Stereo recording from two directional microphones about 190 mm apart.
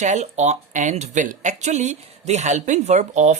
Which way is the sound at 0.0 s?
40° right (ahead or behind).